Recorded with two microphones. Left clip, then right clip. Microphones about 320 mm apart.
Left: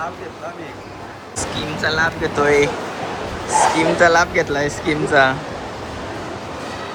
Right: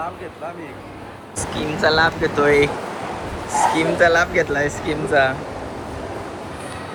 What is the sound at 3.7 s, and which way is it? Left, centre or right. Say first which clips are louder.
Speech: left 1 dB; centre.